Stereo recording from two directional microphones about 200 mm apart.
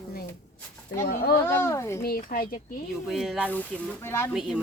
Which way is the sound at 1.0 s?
50° left (ahead or behind).